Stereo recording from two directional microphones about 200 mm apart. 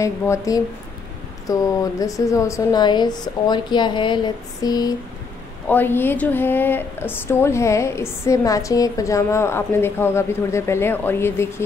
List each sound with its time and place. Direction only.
0.0 s a woman's voice: 15° left (ahead or behind)